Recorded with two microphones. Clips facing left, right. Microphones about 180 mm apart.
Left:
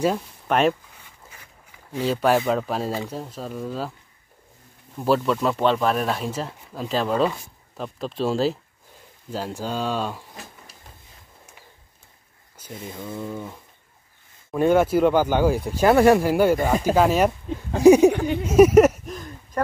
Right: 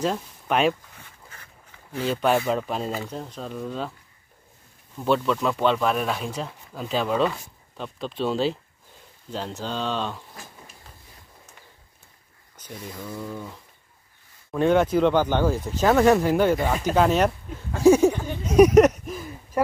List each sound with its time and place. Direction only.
0.0 s speech: centre (ahead or behind)
1.3 s walk: 10° left (ahead or behind)
2.0 s speech: 5° left (ahead or behind)
5.0 s speech: 5° left (ahead or behind)
12.7 s speech: 25° left (ahead or behind)
14.5 s speech: 5° left (ahead or behind)
18.4 s a sound: 5° left (ahead or behind)
19.1 s a sound: 5° right (ahead or behind)